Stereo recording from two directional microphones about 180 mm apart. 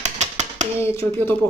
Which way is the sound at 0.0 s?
40° right (ahead or behind).